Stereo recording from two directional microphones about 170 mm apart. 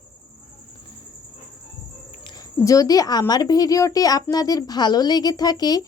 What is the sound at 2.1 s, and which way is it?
Speech, 25° left (ahead or behind).